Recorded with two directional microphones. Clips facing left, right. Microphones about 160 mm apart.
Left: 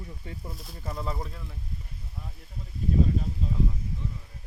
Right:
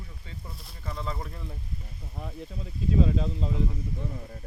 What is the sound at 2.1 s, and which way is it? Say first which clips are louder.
Speech: right 9 dB; 80° right.